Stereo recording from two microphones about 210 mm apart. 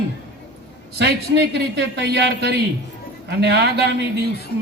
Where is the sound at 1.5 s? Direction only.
55° right (ahead or behind).